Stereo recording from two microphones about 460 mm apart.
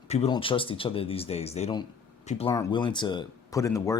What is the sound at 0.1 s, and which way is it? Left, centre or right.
Speech, centre.